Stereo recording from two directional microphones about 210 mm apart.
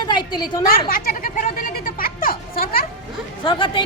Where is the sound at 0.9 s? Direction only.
40° left (ahead or behind).